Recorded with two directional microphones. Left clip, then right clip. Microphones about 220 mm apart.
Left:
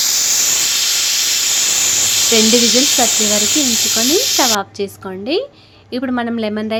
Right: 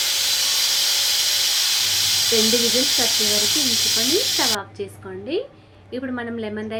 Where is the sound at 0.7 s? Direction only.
10° right (ahead or behind).